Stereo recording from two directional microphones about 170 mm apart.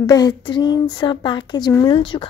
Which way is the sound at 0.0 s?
20° left (ahead or behind).